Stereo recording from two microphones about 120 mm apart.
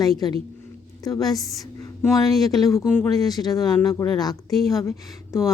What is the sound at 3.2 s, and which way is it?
A woman's voice, 30° left (ahead or behind).